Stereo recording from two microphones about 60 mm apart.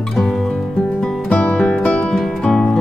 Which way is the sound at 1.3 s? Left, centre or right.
Centre.